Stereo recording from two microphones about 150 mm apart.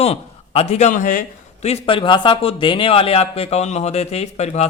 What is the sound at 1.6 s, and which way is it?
A man's voice, 40° left (ahead or behind).